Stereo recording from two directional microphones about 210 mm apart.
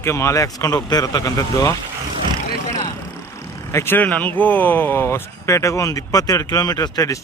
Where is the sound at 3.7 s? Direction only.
10° left (ahead or behind).